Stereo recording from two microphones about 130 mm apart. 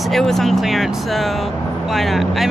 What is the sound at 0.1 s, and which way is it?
Speech, centre (ahead or behind).